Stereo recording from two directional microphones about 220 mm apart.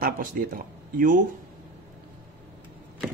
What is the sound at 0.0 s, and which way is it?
Speech, 40° right (ahead or behind).